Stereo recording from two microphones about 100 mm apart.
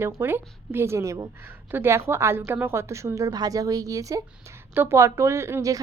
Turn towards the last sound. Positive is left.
turn(degrees=-30)  # may be behind; listen again after turning